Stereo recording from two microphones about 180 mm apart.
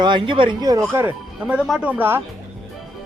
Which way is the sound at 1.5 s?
Centre (ahead or behind).